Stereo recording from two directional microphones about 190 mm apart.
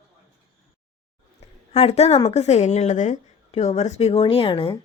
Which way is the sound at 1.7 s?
35° left (ahead or behind).